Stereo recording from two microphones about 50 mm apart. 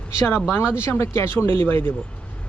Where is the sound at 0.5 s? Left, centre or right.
Left.